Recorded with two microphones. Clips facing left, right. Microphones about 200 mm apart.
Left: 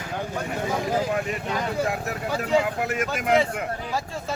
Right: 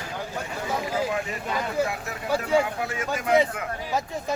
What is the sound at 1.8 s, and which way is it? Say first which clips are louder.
Speech: left 3 dB; 40° left (ahead or behind).